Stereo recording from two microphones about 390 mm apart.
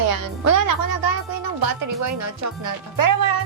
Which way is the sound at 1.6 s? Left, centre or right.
Right.